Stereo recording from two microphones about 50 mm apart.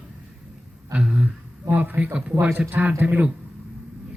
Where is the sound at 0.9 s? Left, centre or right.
Right.